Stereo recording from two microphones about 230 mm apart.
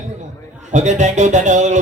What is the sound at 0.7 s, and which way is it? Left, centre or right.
Speech, right.